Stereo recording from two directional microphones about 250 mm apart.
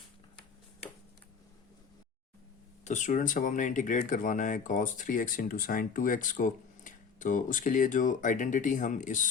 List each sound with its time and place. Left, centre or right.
2.8 s speech: left